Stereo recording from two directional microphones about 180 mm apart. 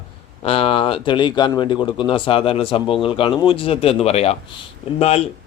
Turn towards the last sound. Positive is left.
turn(degrees=35)  # may be behind; listen again after turning